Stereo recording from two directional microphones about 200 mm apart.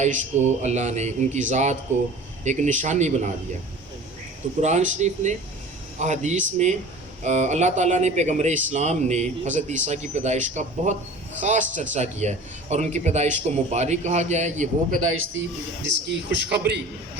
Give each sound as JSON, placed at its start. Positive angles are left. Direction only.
{"t": 0.6, "sound": "speech", "side_deg": -35}
{"t": 4.6, "sound": "speech", "side_deg": -35}
{"t": 15.1, "sound": "a man's voice", "side_deg": -75}
{"t": 16.0, "sound": "a man's voice", "side_deg": -55}